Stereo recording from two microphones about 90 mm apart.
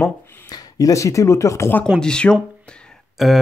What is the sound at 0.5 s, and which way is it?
Speech, 45° left (ahead or behind).